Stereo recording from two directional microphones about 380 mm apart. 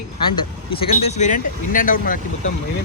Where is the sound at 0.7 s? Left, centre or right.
Centre.